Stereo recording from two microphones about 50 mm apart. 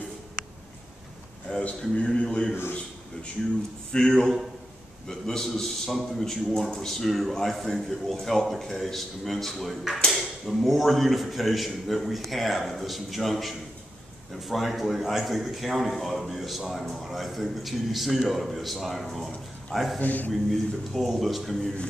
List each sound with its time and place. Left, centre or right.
1.8 s a man's voice: left
3.9 s a man's voice: centre
20.0 s a man's voice: left
20.4 s a man's voice: centre